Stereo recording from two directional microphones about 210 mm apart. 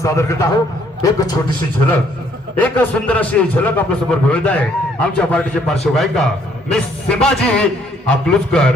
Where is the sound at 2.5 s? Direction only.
5° left (ahead or behind).